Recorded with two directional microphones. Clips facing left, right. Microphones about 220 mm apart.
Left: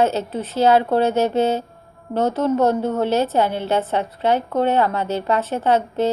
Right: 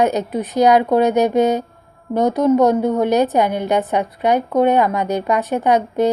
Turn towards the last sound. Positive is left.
turn(degrees=-15)  # may be behind; listen again after turning